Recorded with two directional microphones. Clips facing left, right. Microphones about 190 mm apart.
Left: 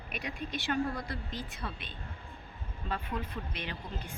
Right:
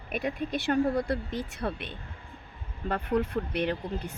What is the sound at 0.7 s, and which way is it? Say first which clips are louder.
Speech: right 7 dB; 40° right (ahead or behind).